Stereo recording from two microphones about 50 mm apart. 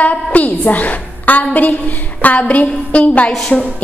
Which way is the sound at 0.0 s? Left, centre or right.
Left.